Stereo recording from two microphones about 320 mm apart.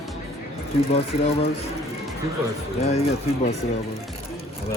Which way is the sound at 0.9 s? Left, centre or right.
Centre.